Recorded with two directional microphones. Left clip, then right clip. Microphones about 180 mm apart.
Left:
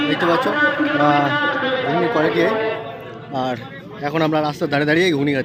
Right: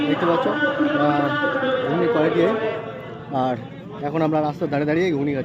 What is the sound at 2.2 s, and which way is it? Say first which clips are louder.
Speech: left 2 dB; 15° right (ahead or behind).